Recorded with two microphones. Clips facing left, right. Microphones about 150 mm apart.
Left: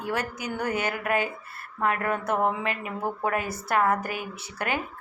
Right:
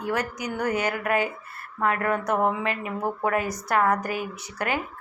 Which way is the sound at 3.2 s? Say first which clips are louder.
Right 3 dB; 25° left (ahead or behind).